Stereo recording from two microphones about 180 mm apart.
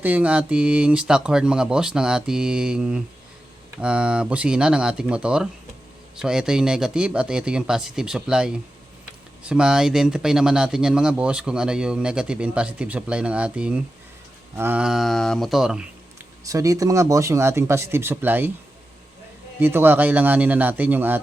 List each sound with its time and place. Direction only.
0.0 s speech: 10° right (ahead or behind)
16.4 s speech: 20° right (ahead or behind)
19.5 s speech: 10° right (ahead or behind)